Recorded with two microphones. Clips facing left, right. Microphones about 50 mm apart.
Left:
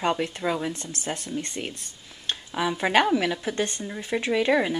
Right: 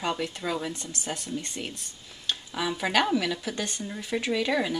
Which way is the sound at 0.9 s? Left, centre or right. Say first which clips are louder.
Left 2 dB; left.